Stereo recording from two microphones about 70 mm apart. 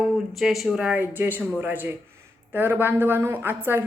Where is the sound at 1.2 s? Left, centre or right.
Right.